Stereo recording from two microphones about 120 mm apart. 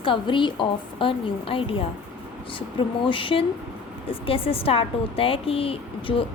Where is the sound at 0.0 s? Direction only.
45° left (ahead or behind).